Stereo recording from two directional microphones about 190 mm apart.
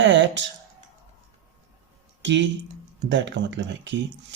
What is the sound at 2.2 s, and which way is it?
Speech, 70° right (ahead or behind).